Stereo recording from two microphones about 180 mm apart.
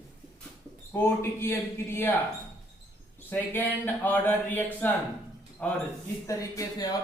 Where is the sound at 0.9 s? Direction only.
15° left (ahead or behind).